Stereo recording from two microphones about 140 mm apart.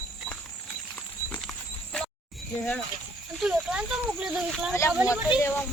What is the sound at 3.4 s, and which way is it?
Speech, 5° right (ahead or behind).